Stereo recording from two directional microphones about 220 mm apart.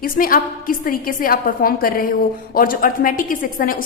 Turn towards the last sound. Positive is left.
turn(degrees=40)  # may be behind; listen again after turning